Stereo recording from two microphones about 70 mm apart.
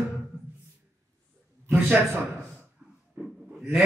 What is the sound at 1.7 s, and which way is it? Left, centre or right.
Speech, right.